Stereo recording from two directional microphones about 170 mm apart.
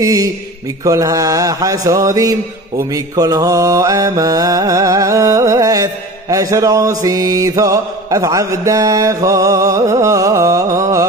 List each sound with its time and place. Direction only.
0.0 s mantra: 20° right (ahead or behind)